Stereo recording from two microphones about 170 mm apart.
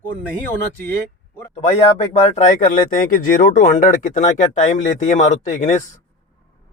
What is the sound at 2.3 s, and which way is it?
Speech, 45° left (ahead or behind).